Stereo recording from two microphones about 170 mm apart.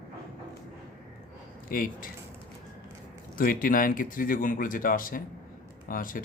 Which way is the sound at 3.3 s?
55° left (ahead or behind).